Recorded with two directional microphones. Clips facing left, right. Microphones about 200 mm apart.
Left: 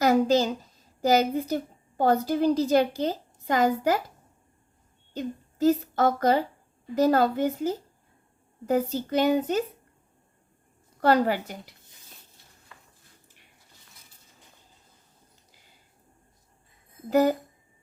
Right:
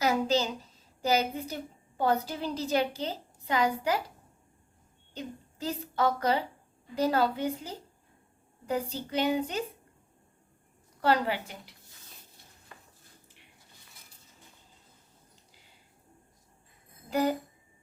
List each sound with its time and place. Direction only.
0.0 s a child's voice: 50° left (ahead or behind)
5.1 s a woman's voice: 45° left (ahead or behind)
8.9 s a woman's voice: 45° left (ahead or behind)
11.0 s a woman's voice: 45° left (ahead or behind)
17.1 s speech: 45° left (ahead or behind)